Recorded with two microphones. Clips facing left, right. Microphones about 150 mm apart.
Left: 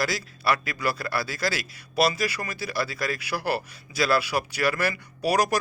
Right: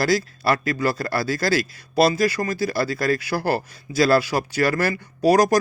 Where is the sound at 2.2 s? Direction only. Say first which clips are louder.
Right 8 dB; 45° right (ahead or behind).